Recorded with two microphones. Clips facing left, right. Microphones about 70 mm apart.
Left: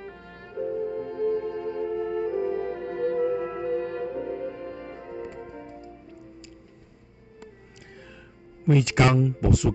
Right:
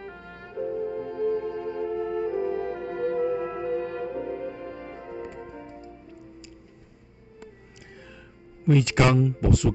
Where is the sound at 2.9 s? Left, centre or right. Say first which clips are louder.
Left 1 dB; right.